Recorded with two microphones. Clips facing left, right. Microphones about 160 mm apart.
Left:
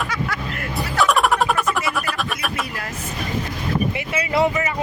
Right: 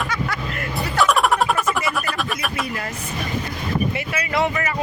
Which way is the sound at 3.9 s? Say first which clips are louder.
Left 2 dB; 25° left (ahead or behind).